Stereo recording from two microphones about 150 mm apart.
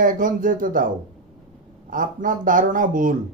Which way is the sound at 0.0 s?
65° right (ahead or behind).